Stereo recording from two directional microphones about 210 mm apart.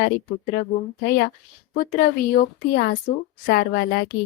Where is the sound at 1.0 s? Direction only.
50° left (ahead or behind).